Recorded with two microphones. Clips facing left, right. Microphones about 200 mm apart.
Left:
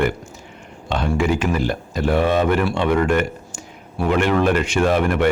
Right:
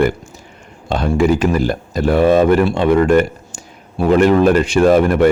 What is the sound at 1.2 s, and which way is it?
Speech, 40° right (ahead or behind).